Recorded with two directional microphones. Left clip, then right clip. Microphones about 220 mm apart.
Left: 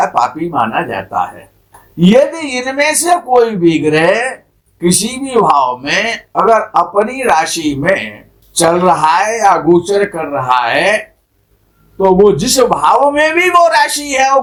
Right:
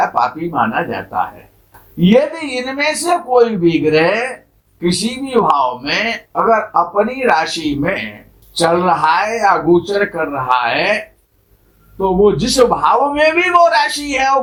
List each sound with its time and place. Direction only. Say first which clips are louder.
0.0 s speech: left 2 dB; 35° left (ahead or behind)